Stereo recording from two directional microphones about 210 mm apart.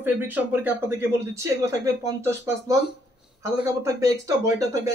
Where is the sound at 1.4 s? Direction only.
15° right (ahead or behind).